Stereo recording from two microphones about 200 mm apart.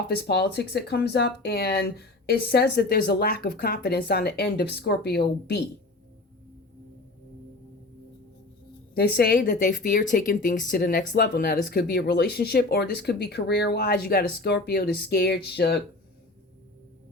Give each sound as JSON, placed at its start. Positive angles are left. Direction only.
{"t": 0.1, "sound": "speech", "side_deg": 55}
{"t": 9.0, "sound": "speech", "side_deg": 55}
{"t": 9.6, "sound": "speech", "side_deg": 40}